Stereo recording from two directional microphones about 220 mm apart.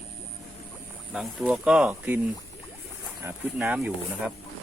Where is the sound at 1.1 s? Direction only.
Centre (ahead or behind).